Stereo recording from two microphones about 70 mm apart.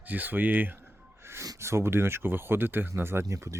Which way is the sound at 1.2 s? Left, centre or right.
Right.